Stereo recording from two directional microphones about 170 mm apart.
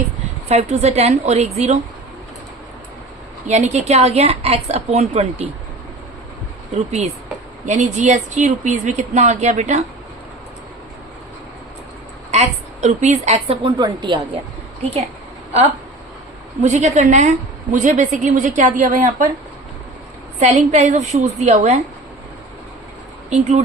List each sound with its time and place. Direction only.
0.4 s a woman's voice: 40° right (ahead or behind)
3.4 s a woman's voice: 45° right (ahead or behind)
6.7 s a woman's voice: 40° right (ahead or behind)
12.3 s a woman's voice: 40° right (ahead or behind); by 14.2 s 25° right (ahead or behind)
16.6 s a woman's voice: 40° right (ahead or behind)
20.4 s a woman's voice: 45° right (ahead or behind)
23.3 s a woman's voice: 40° right (ahead or behind)